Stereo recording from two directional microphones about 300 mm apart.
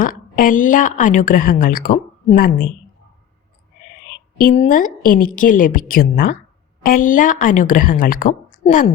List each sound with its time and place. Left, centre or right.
0.0 s a woman's voice: left
4.4 s a woman's voice: left